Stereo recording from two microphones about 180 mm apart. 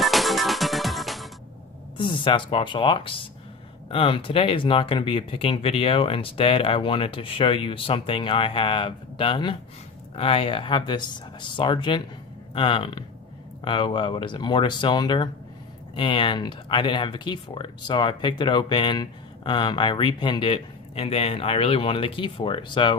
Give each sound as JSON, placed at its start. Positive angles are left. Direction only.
{"t": 0.0, "sound": "music", "side_deg": 0}
{"t": 2.0, "sound": "speech", "side_deg": 25}